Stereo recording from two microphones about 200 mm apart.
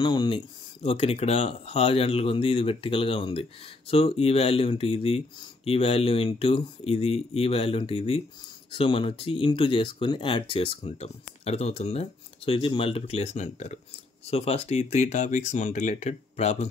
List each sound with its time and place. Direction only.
0.0 s speech: 25° left (ahead or behind)